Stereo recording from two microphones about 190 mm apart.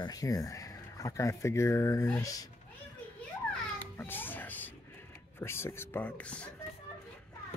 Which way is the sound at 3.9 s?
10° left (ahead or behind).